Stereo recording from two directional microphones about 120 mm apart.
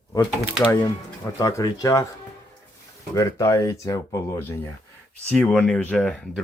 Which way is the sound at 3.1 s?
25° left (ahead or behind).